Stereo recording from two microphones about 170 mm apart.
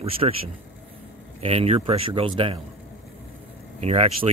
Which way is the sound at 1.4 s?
35° right (ahead or behind).